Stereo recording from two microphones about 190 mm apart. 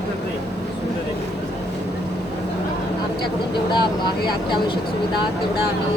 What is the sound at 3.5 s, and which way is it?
Speech, 25° left (ahead or behind).